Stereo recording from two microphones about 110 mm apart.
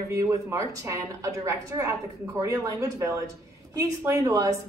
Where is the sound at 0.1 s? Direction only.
30° right (ahead or behind).